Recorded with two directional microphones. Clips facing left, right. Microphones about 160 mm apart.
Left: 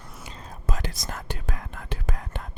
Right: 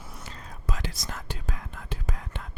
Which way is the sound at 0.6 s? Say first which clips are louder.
Left 2 dB; 50° left (ahead or behind).